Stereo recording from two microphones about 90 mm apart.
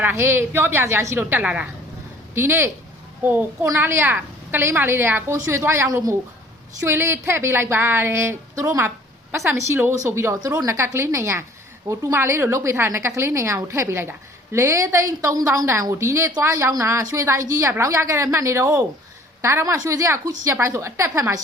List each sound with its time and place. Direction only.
0.0 s a woman's voice: 25° right (ahead or behind)